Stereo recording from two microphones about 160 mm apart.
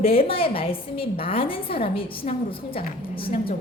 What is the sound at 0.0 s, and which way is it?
A woman's voice, 35° left (ahead or behind).